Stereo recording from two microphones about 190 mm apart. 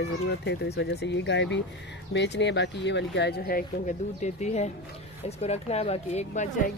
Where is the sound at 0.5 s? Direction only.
60° left (ahead or behind); by 6.7 s 40° left (ahead or behind).